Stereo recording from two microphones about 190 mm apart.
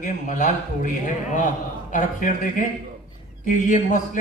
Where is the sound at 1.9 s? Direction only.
45° left (ahead or behind).